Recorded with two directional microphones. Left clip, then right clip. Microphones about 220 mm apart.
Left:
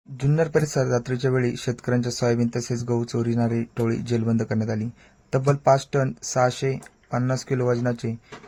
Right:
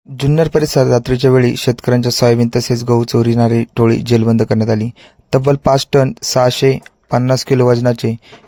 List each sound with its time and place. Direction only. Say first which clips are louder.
0.2 s speech: right 9 dB; 40° right (ahead or behind)